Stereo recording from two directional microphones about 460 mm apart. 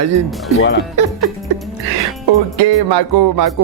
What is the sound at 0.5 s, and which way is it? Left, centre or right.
Speech, left.